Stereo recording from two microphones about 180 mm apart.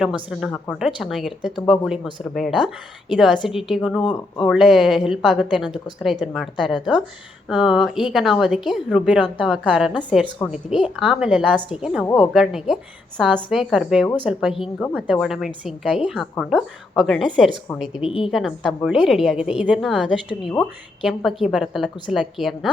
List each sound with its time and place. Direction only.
0.0 s a woman's voice: 5° right (ahead or behind)
4.0 s speech: 25° left (ahead or behind)
4.4 s a woman's voice: centre (ahead or behind)